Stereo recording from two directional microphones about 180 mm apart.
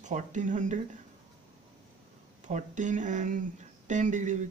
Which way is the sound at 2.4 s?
45° right (ahead or behind).